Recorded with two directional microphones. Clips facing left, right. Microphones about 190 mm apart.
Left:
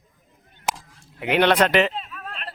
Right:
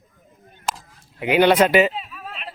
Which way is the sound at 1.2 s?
5° right (ahead or behind).